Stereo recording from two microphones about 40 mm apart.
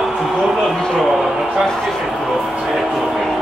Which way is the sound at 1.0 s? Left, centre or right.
Centre.